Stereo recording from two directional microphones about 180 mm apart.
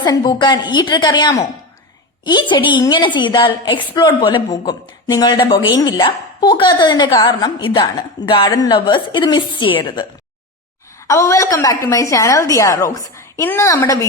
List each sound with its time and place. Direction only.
0.0 s speech: 25° left (ahead or behind)
11.1 s a woman's voice: 15° left (ahead or behind)